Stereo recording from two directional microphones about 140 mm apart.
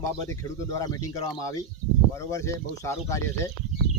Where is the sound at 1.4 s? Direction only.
25° left (ahead or behind).